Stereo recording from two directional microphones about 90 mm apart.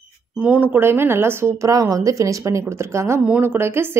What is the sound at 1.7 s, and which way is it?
A woman's voice, 40° right (ahead or behind).